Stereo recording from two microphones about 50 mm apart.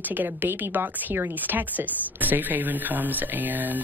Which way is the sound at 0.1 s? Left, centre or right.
Right.